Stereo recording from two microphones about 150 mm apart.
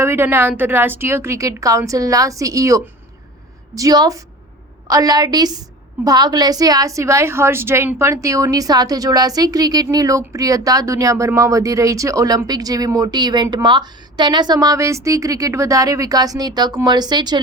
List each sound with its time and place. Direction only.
0.0 s a woman's voice: 15° right (ahead or behind)